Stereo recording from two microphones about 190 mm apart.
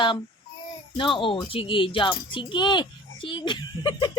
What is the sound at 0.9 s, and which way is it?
A child's voice, 25° left (ahead or behind).